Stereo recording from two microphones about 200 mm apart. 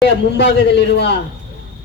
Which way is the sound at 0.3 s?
60° left (ahead or behind).